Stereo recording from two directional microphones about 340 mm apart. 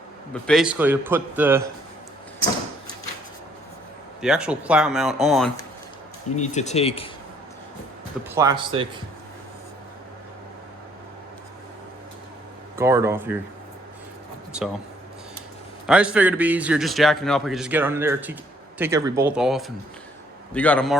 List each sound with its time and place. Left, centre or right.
0.4 s a man's voice: centre
4.2 s a man's voice: centre
6.3 s speech: centre
8.4 s speech: centre
12.7 s speech: centre
15.9 s a man's voice: centre